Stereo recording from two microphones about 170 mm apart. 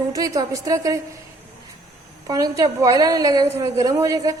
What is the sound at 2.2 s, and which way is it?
A woman's voice, 20° right (ahead or behind).